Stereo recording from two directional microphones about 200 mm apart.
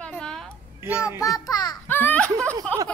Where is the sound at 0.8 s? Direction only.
5° right (ahead or behind).